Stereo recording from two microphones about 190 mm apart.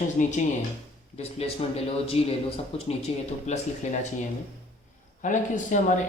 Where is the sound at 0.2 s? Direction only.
40° left (ahead or behind).